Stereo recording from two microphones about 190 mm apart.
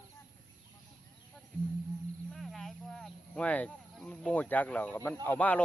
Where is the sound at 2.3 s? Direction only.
Centre (ahead or behind).